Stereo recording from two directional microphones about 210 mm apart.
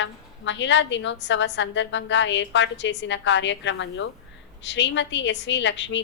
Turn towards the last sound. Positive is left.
turn(degrees=60)  # may be behind; listen again after turning